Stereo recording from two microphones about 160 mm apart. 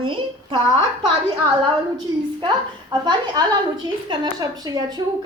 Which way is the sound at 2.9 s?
25° right (ahead or behind).